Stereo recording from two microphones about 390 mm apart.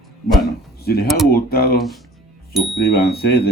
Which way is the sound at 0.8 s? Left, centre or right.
Left.